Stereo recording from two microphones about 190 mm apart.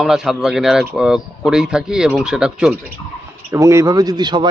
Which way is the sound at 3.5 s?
15° right (ahead or behind).